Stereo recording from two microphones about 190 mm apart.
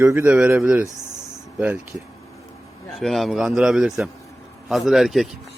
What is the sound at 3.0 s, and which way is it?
A man's voice, centre (ahead or behind).